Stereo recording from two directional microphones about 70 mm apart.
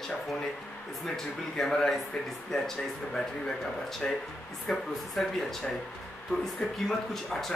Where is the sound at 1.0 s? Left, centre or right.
Centre.